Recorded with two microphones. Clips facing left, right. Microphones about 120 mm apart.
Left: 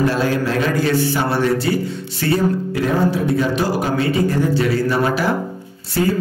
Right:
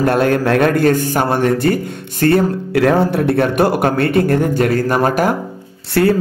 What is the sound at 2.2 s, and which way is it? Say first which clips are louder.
Speech: right 4 dB; 60° right (ahead or behind).